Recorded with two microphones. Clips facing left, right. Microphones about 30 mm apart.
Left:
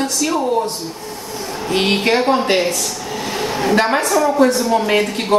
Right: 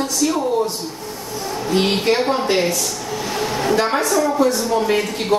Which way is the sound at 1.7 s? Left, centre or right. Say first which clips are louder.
Left 1 dB; left.